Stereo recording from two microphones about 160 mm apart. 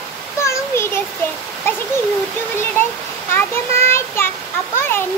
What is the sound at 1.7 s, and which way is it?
Speech, 15° left (ahead or behind).